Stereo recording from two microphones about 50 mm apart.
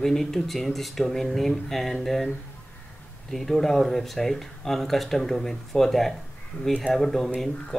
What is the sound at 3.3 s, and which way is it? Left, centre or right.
Speech, centre.